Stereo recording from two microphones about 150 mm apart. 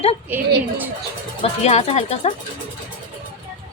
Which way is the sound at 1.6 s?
45° left (ahead or behind).